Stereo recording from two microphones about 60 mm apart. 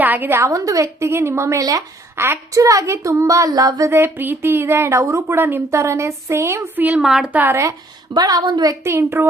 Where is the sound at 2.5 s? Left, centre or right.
Right.